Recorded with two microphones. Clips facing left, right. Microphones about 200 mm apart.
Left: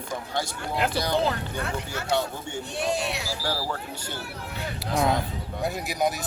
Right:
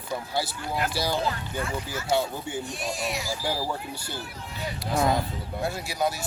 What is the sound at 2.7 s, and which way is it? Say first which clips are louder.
Speech: left 3 dB; 65° left (ahead or behind).